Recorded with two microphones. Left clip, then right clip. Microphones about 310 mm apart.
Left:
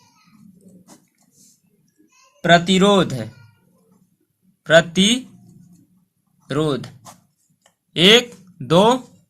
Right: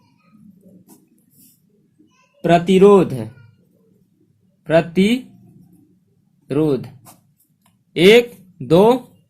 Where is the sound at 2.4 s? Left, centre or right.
Left.